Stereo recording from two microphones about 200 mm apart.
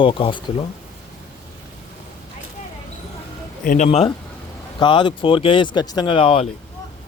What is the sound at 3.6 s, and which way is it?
Speech, 35° left (ahead or behind).